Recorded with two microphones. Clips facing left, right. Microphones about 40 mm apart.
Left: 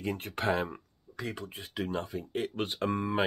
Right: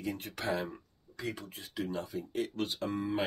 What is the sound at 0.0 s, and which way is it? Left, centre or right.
Speech, left.